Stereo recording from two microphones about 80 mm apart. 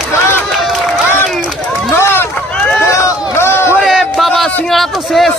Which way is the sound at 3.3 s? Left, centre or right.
Left.